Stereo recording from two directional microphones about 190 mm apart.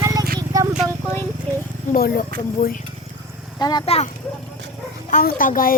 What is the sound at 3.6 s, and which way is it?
Speech, 20° left (ahead or behind).